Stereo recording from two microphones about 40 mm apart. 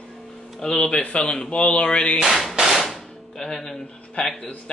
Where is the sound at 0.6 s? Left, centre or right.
Centre.